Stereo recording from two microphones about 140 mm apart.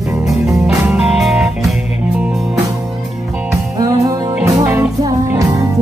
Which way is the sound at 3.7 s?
25° right (ahead or behind).